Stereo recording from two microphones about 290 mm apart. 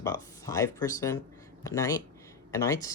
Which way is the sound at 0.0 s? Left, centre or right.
Centre.